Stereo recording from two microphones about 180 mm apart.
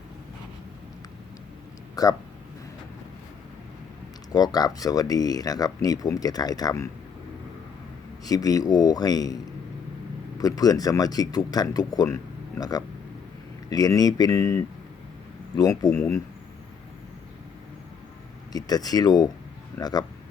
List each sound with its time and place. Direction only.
2.0 s speech: 20° left (ahead or behind)
4.3 s speech: 20° left (ahead or behind)
8.2 s speech: 20° left (ahead or behind)
10.4 s speech: 20° left (ahead or behind)
15.9 s speech: 5° left (ahead or behind)
18.5 s speech: 20° left (ahead or behind)